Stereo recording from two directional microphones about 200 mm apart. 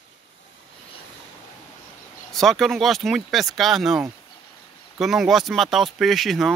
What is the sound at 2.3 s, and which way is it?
Speech, centre (ahead or behind).